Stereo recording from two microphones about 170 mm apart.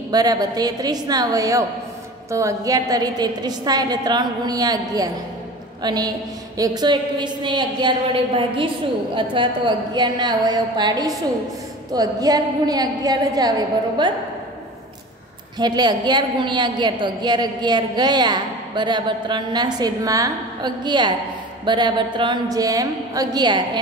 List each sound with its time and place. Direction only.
0.1 s a woman's voice: 25° right (ahead or behind)
15.6 s a woman's voice: 25° right (ahead or behind)